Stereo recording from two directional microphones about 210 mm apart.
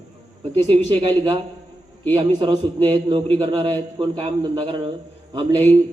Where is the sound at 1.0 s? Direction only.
20° right (ahead or behind).